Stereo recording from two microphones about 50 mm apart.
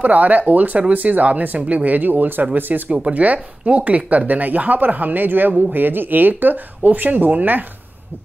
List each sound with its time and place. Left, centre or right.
0.0 s speech: right
2.7 s speech: right